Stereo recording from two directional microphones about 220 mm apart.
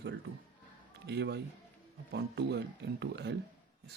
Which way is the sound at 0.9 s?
50° right (ahead or behind).